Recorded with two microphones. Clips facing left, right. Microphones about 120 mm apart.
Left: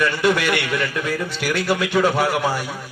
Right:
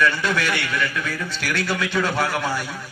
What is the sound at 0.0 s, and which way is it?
A man's voice, 15° left (ahead or behind).